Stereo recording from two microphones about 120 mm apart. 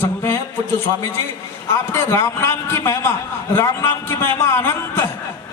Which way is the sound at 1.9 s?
20° left (ahead or behind).